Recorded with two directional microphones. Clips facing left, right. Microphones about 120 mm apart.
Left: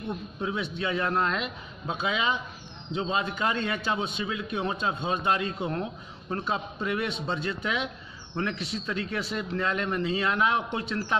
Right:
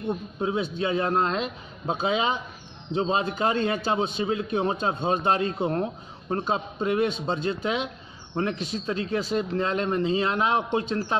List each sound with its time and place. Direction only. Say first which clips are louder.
0.1 s a man's voice: right 5 dB; 30° right (ahead or behind)